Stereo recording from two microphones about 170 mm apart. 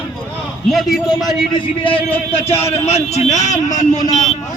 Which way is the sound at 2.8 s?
40° left (ahead or behind).